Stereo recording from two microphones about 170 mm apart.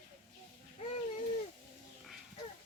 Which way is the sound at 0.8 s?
35° left (ahead or behind).